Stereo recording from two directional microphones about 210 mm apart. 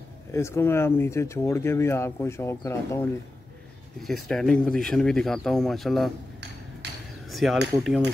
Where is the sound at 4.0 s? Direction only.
Centre (ahead or behind).